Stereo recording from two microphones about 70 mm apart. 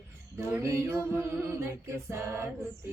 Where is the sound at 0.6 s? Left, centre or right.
Right.